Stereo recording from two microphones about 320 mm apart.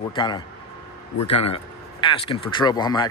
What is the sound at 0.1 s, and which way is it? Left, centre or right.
Speech, centre.